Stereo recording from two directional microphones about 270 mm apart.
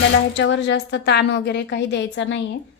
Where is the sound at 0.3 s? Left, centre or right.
Left.